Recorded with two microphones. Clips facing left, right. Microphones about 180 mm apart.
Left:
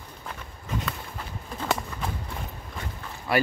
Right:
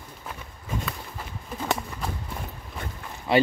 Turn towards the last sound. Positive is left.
turn(degrees=-25)  # may be behind; listen again after turning